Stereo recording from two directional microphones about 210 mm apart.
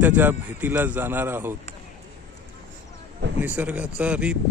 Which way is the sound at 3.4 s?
10° right (ahead or behind).